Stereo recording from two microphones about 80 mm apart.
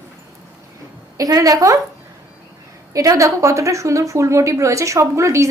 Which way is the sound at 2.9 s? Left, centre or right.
Right.